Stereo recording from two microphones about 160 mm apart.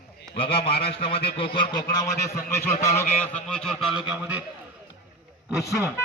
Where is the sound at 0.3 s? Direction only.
35° left (ahead or behind); by 4.4 s 10° right (ahead or behind).